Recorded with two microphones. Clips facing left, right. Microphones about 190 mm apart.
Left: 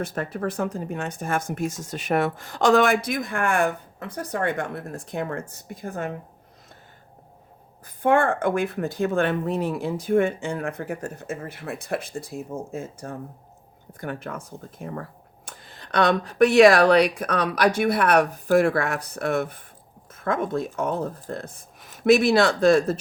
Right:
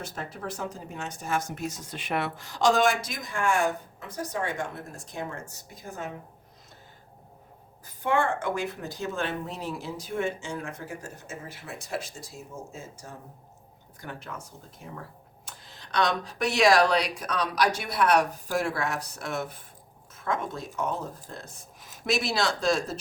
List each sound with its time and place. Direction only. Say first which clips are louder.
0.0 s speech: left 9 dB; 55° left (ahead or behind)
7.9 s speech: left 6 dB; 55° left (ahead or behind)